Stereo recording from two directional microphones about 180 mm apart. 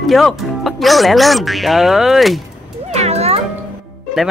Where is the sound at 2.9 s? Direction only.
35° right (ahead or behind).